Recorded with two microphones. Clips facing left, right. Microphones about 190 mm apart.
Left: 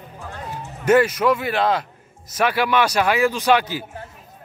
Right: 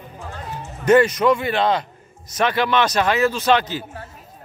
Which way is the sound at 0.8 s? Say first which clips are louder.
Right 2 dB; 5° left (ahead or behind).